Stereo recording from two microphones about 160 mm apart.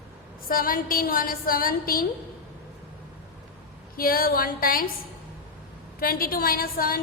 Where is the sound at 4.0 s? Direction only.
65° left (ahead or behind).